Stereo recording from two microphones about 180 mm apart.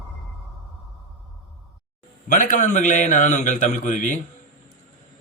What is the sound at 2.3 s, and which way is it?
A man's voice, 45° left (ahead or behind).